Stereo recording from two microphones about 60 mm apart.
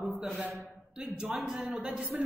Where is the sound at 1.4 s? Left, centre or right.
Centre.